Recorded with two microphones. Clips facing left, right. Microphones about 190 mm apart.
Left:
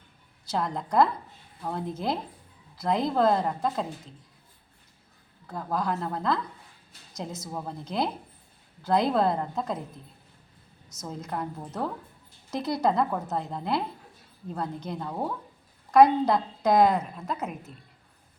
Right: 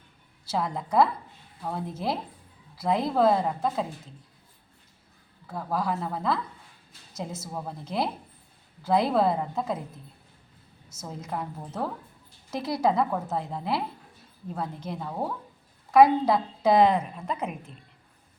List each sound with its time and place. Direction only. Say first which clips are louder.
0.4 s a woman's voice: even; 5° right (ahead or behind)
5.5 s a woman's voice: even; 5° right (ahead or behind)
11.0 s a woman's voice: even; 5° right (ahead or behind)
12.5 s a woman's voice: even; 5° right (ahead or behind)
17.2 s a woman's voice: right 1 dB; 5° left (ahead or behind)